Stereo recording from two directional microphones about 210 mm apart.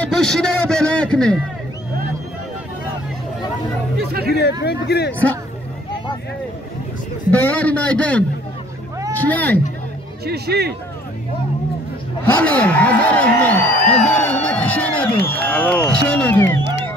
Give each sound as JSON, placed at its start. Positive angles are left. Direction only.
{"t": 0.0, "sound": "a man's voice", "side_deg": 5}
{"t": 4.1, "sound": "speech", "side_deg": -45}
{"t": 4.4, "sound": "speech", "side_deg": 50}
{"t": 7.2, "sound": "a man's voice", "side_deg": 5}
{"t": 10.2, "sound": "speech", "side_deg": -50}
{"t": 12.4, "sound": "a sound", "side_deg": 5}
{"t": 15.8, "sound": "speech", "side_deg": 10}